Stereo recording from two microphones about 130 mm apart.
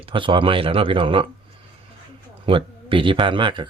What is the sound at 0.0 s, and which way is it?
Speech, 40° right (ahead or behind).